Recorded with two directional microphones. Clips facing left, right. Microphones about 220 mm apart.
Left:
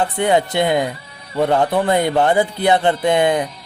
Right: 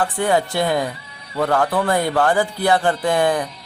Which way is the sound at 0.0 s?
20° left (ahead or behind).